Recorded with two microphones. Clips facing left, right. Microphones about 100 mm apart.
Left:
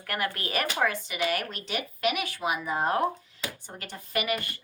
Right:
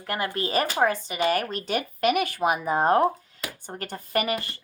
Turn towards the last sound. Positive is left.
turn(degrees=-30)  # may be behind; listen again after turning